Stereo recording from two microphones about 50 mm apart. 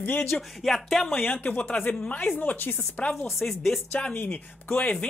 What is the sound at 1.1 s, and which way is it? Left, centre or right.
Speech, left.